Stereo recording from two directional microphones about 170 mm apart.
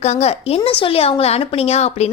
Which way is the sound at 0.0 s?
40° left (ahead or behind).